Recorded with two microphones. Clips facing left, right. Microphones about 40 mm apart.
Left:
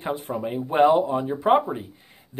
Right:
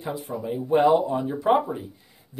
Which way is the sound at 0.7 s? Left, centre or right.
Left.